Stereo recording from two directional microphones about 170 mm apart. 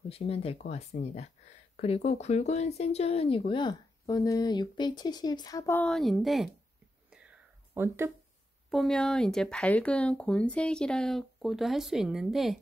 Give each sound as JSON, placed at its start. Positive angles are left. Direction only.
{"t": 0.1, "sound": "speech", "side_deg": 35}
{"t": 7.1, "sound": "whispering", "side_deg": -5}
{"t": 8.6, "sound": "speech", "side_deg": 0}